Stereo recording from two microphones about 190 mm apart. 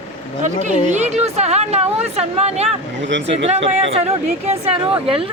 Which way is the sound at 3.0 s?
70° right (ahead or behind).